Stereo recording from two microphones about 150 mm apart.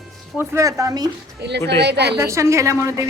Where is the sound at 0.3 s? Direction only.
20° right (ahead or behind).